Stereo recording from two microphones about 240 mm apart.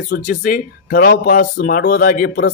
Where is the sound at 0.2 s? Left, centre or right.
Left.